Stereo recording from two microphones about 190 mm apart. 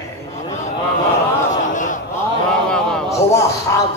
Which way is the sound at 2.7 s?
5° left (ahead or behind).